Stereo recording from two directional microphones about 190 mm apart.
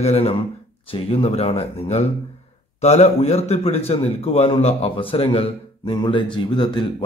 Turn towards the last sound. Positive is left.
turn(degrees=25)  # may be behind; listen again after turning